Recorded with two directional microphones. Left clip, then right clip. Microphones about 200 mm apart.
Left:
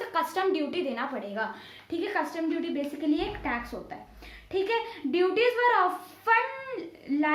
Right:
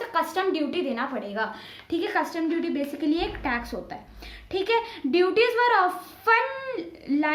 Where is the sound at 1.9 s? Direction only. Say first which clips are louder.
Right 4 dB; 25° right (ahead or behind).